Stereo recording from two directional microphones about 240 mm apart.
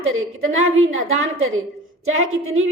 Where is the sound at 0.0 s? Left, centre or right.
Right.